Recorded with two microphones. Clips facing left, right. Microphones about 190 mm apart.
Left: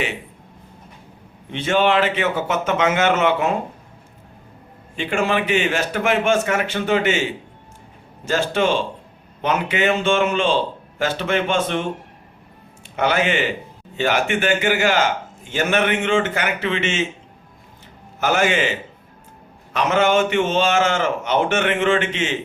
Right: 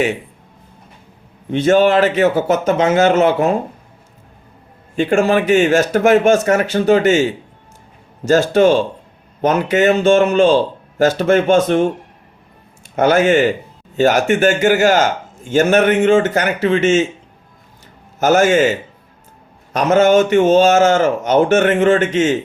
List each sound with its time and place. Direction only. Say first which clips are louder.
1.5 s speech: right 7 dB; 45° right (ahead or behind)
4.9 s speech: right 7 dB; 45° right (ahead or behind)
13.0 s speech: right 8 dB; 45° right (ahead or behind)
18.2 s speech: right 7 dB; 45° right (ahead or behind)